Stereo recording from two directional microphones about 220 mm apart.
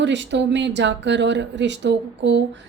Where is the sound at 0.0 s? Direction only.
55° right (ahead or behind).